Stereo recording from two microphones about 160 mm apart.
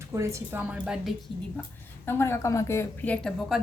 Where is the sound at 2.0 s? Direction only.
15° left (ahead or behind).